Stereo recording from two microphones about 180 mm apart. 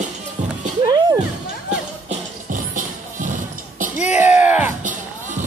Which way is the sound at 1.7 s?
45° right (ahead or behind).